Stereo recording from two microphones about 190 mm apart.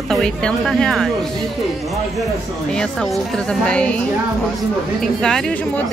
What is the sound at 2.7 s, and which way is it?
Speech, centre (ahead or behind).